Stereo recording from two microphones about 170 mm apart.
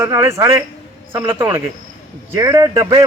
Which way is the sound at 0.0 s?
15° right (ahead or behind).